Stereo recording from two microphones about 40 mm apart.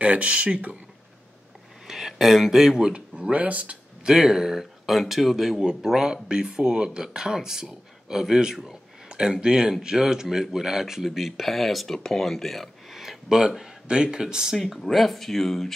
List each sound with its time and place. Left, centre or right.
0.0 s speech: right
1.9 s speech: centre
2.9 s speech: right
4.0 s speech: centre
13.4 s speech: centre
14.6 s speech: centre